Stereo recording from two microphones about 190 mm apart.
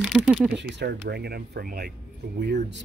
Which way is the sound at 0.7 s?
60° right (ahead or behind).